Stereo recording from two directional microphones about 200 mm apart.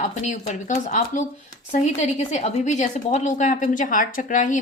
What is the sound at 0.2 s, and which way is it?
A woman's voice, 40° left (ahead or behind).